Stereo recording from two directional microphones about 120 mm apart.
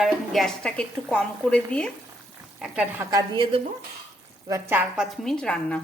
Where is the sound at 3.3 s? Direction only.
45° right (ahead or behind).